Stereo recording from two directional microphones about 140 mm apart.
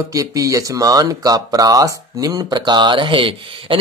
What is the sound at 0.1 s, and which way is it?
Speech, 25° right (ahead or behind).